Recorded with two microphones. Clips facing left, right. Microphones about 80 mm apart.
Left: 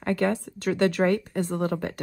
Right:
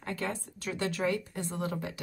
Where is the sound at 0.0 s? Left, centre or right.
Left.